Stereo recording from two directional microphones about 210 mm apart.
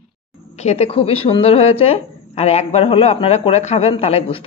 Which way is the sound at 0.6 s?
30° left (ahead or behind).